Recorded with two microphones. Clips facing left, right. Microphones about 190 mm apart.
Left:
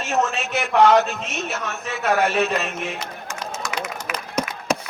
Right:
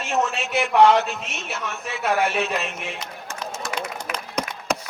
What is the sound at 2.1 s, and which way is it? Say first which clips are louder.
Speech: left 3 dB; 40° left (ahead or behind).